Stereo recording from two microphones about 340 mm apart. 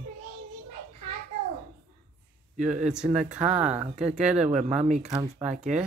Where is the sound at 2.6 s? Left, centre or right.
Right.